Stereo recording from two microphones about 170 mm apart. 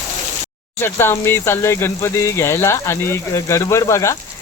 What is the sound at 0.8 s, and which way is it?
Speech, 15° left (ahead or behind).